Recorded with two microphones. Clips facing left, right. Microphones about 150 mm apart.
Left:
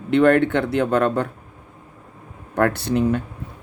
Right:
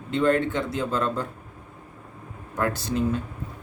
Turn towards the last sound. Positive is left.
turn(degrees=65)  # may be behind; listen again after turning